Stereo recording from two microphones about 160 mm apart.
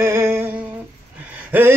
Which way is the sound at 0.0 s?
15° right (ahead or behind).